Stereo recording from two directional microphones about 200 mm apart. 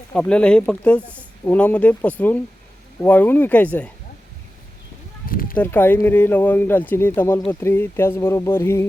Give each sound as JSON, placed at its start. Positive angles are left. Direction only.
{"t": 0.1, "sound": "speech", "side_deg": 5}
{"t": 5.2, "sound": "a sound", "side_deg": 45}
{"t": 5.5, "sound": "speech", "side_deg": 10}